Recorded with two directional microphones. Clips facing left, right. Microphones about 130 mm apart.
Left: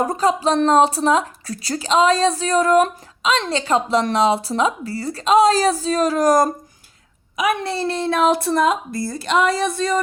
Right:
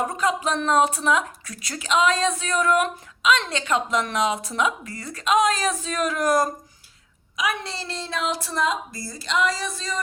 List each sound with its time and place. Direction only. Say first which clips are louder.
0.0 s a woman's voice: left 6 dB; 35° left (ahead or behind)
7.3 s a woman's voice: left 7 dB; 55° left (ahead or behind)